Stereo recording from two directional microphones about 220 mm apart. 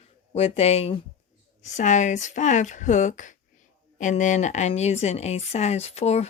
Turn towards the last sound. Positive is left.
turn(degrees=30)  # may be behind; listen again after turning